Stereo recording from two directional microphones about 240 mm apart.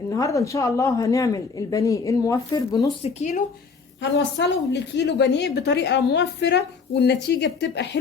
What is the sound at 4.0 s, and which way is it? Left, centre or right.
A woman's voice, left.